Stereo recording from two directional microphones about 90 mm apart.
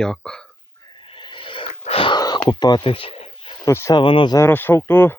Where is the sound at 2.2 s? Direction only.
45° left (ahead or behind).